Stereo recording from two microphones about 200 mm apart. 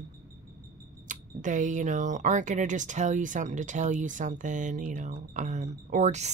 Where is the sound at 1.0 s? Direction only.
40° right (ahead or behind).